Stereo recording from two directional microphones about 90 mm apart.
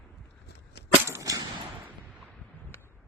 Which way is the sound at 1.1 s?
35° right (ahead or behind).